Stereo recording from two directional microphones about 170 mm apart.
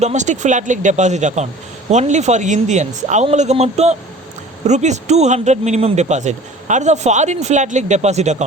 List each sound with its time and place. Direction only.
0.0 s speech: 45° right (ahead or behind)